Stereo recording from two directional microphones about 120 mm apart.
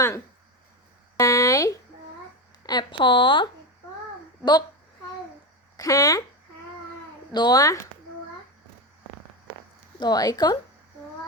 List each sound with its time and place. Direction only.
1.1 s a sound: 25° left (ahead or behind)
2.6 s speech: 40° left (ahead or behind)
5.7 s speech: 30° left (ahead or behind)
7.3 s speech: 35° left (ahead or behind)
10.0 s speech: 35° left (ahead or behind)